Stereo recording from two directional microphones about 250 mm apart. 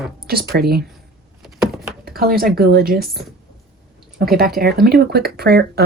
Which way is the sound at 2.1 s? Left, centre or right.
Right.